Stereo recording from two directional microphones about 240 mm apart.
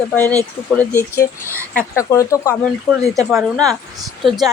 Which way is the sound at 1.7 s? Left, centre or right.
Centre.